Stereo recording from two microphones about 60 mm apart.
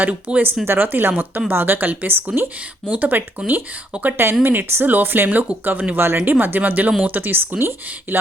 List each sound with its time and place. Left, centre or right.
0.0 s speech: right
0.6 s speech: right
3.9 s speech: right
4.4 s speech: right
6.0 s speech: right
6.3 s speech: right